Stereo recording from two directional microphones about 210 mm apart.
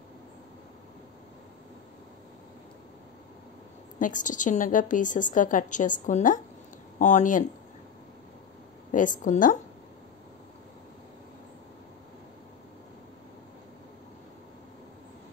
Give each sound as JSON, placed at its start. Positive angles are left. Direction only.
{"t": 4.0, "sound": "a woman's voice", "side_deg": 35}
{"t": 8.9, "sound": "a woman's voice", "side_deg": 40}